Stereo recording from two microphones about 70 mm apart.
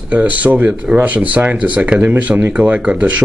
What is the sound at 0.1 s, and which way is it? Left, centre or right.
Speech, right.